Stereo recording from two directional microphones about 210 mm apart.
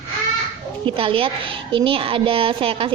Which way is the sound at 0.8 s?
25° right (ahead or behind).